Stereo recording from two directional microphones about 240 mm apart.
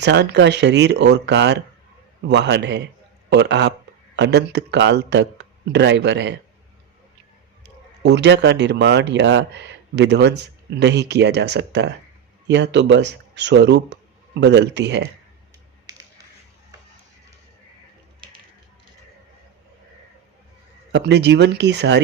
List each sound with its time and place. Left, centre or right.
0.0 s a man's voice: right
7.6 s speech: right
15.9 s a sound: centre
20.9 s speech: right